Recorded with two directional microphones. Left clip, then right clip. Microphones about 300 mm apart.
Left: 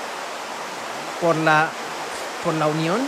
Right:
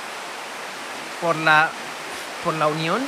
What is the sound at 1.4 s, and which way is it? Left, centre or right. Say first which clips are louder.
Speech: right 5 dB; centre.